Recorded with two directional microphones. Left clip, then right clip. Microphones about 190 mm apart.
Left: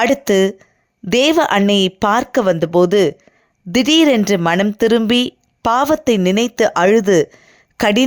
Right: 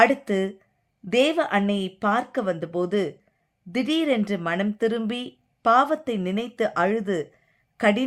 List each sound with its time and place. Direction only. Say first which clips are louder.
0.0 s speech: left 6 dB; 50° left (ahead or behind)